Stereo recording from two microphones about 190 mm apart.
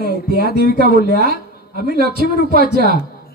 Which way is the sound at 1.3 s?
55° left (ahead or behind).